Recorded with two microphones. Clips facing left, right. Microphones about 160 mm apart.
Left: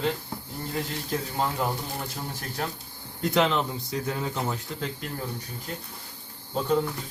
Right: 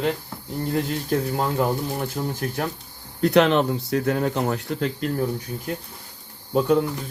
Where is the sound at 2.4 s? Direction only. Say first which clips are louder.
Right 6 dB; 65° right (ahead or behind).